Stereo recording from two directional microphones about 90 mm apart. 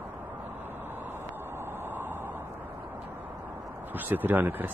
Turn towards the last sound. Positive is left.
turn(degrees=-20)  # may be behind; listen again after turning